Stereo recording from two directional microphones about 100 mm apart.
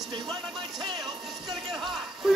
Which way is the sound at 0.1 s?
50° right (ahead or behind).